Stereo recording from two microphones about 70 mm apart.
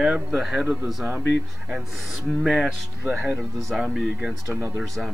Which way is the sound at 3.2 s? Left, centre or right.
Centre.